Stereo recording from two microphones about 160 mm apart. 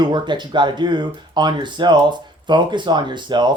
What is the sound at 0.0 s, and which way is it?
Speech, 30° right (ahead or behind).